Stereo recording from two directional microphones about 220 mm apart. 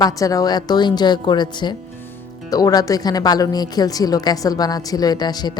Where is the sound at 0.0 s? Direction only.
15° left (ahead or behind).